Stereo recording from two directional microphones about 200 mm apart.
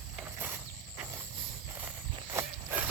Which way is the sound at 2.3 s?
10° right (ahead or behind).